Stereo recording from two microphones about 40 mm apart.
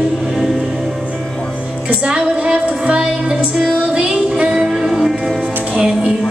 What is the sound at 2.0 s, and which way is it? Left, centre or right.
Child singing, right.